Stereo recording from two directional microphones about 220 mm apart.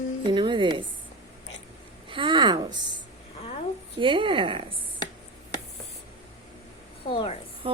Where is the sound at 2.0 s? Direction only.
25° right (ahead or behind).